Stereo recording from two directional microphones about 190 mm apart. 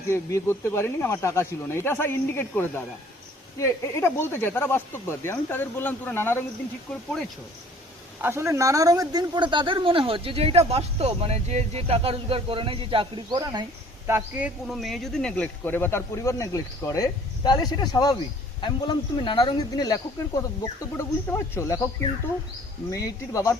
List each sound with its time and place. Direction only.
0.1 s speech: 15° left (ahead or behind)
8.2 s speech: 15° right (ahead or behind)
14.1 s speech: 10° right (ahead or behind); by 21.8 s 15° left (ahead or behind)
23.0 s speech: 15° left (ahead or behind)